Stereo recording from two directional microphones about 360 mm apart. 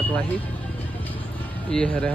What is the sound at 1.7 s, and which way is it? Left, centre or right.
Speech, centre.